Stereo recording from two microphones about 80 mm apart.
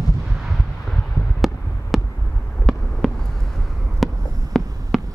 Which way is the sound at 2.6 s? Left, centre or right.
Centre.